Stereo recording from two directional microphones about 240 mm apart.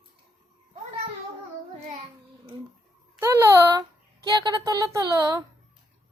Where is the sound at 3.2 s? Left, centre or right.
Centre.